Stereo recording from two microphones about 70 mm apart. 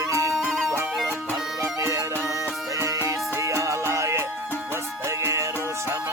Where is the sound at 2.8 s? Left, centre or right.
Right.